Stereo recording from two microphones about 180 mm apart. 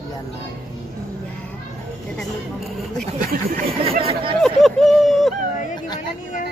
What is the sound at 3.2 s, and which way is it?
Speech, 50° right (ahead or behind).